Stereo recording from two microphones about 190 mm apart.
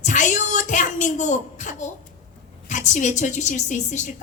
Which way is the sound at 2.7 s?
40° left (ahead or behind).